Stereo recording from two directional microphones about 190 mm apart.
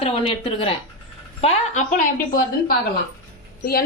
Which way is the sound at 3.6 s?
55° left (ahead or behind).